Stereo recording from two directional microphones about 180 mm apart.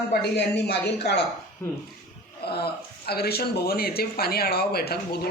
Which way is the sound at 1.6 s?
10° left (ahead or behind).